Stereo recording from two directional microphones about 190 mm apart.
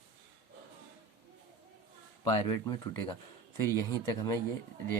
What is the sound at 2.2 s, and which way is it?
Speech, 20° left (ahead or behind).